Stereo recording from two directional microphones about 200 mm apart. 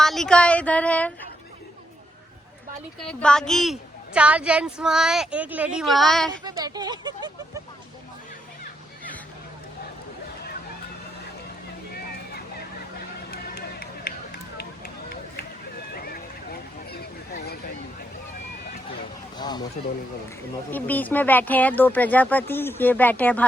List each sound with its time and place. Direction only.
0.0 s speech: centre (ahead or behind)
3.0 s a woman's voice: 5° left (ahead or behind)
6.4 s speech: 20° right (ahead or behind)
13.3 s run: 50° left (ahead or behind)
16.0 s a sound: 50° left (ahead or behind)
19.4 s speech: 20° left (ahead or behind)
20.7 s speech: 10° left (ahead or behind)